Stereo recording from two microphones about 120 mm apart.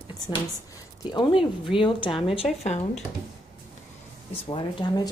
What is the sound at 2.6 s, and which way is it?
Speech, 65° left (ahead or behind).